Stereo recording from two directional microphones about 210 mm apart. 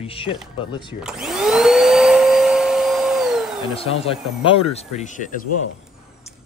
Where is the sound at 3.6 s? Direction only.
25° left (ahead or behind).